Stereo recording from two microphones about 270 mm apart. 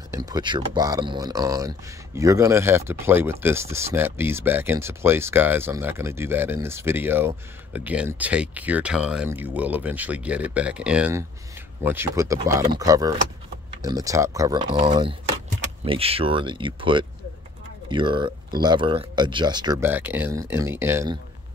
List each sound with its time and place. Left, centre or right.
0.1 s speech: centre